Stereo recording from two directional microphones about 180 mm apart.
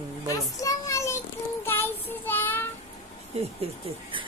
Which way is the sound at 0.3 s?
20° left (ahead or behind).